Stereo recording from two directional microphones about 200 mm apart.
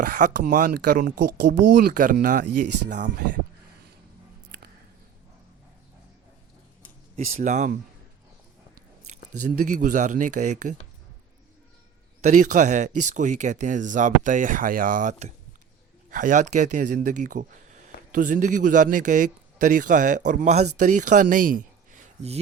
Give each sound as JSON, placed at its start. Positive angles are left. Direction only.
{"t": 0.0, "sound": "speech", "side_deg": -45}
{"t": 7.3, "sound": "speech", "side_deg": -35}
{"t": 9.6, "sound": "speech", "side_deg": -40}
{"t": 12.2, "sound": "speech", "side_deg": -40}